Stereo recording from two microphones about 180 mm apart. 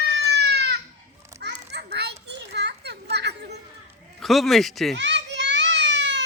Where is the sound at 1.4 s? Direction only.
65° right (ahead or behind).